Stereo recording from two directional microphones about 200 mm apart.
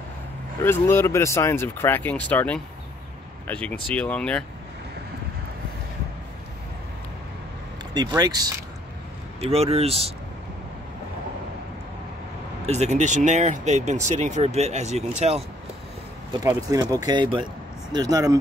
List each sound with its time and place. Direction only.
0.6 s speech: 10° left (ahead or behind)
7.9 s speech: 20° right (ahead or behind)
9.4 s speech: 30° right (ahead or behind)
12.6 s speech: 35° right (ahead or behind)
16.3 s speech: 15° right (ahead or behind)